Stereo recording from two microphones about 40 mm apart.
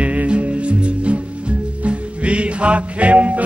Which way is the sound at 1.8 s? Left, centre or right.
Right.